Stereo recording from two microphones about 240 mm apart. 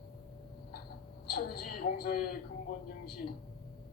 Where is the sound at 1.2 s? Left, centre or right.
Left.